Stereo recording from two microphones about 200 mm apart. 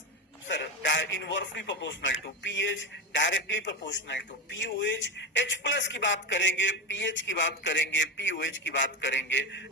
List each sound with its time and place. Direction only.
0.4 s a man's voice: 65° left (ahead or behind)